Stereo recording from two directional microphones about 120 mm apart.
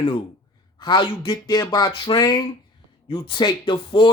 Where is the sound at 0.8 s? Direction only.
40° left (ahead or behind).